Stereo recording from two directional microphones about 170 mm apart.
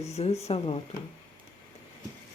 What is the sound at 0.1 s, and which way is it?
Speech, 40° left (ahead or behind).